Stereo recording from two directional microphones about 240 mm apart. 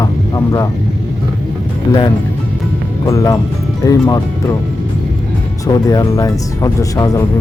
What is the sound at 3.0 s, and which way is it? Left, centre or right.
Speech, centre.